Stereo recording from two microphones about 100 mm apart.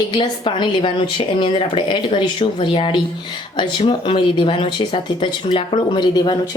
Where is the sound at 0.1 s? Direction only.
50° left (ahead or behind).